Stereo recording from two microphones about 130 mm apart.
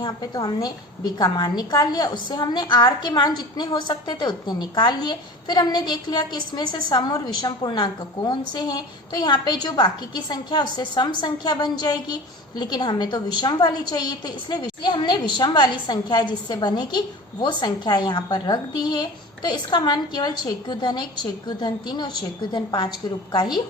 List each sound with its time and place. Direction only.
0.0 s a woman's voice: 30° left (ahead or behind)